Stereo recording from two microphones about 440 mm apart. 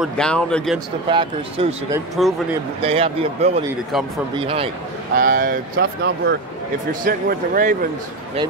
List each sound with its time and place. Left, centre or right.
0.0 s speech: centre
1.0 s speech: centre
2.2 s speech: centre
2.8 s speech: centre